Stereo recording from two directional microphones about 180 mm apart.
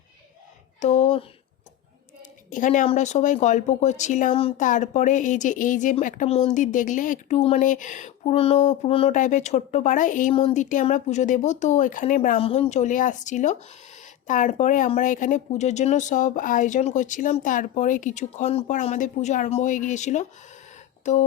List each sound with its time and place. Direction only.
0.8 s speech: 40° left (ahead or behind)
2.5 s speech: 45° left (ahead or behind)
12.4 s speech: 35° left (ahead or behind)